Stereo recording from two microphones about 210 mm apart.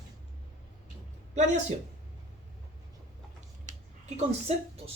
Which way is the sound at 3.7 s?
35° right (ahead or behind).